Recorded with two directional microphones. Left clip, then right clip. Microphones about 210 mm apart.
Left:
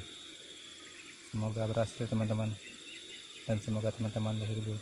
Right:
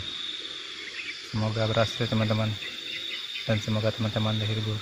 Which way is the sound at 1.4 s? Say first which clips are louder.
Right 9 dB; 10° right (ahead or behind).